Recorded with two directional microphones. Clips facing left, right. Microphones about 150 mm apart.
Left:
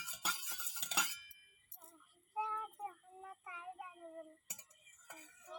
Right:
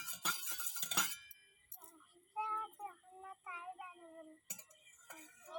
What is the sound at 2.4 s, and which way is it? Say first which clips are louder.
Child singing: left 1 dB; 10° left (ahead or behind).